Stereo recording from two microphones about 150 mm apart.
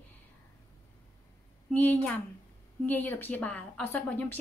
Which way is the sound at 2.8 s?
10° left (ahead or behind).